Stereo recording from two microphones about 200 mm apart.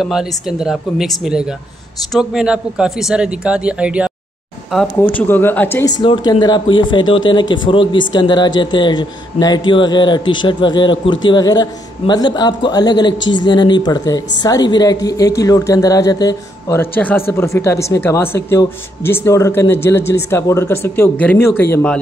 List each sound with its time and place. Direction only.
0.0 s a man's voice: centre (ahead or behind)
5.1 s speech: 10° left (ahead or behind)
6.0 s speech: 25° left (ahead or behind)